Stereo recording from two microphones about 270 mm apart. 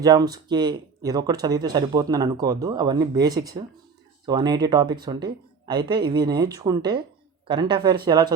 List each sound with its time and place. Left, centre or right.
0.0 s speech: centre